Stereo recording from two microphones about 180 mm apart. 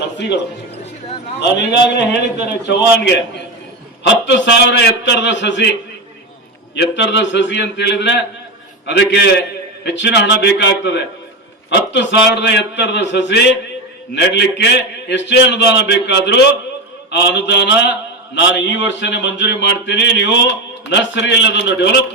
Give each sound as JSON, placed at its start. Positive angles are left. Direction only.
{"t": 0.2, "sound": "speech", "side_deg": 70}
{"t": 6.7, "sound": "speech", "side_deg": 75}